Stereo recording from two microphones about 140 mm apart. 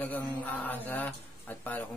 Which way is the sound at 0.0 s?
10° left (ahead or behind).